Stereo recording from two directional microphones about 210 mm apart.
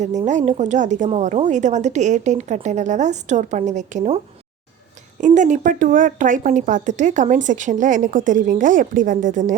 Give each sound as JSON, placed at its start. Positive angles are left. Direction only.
{"t": 0.0, "sound": "speech", "side_deg": -35}
{"t": 5.2, "sound": "speech", "side_deg": -35}